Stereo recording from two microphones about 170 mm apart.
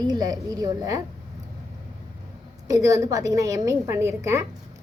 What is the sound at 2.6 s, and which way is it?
A woman's voice, 20° right (ahead or behind).